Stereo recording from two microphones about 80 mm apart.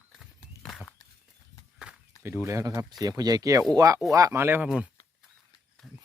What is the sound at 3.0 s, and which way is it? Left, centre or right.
Speech, right.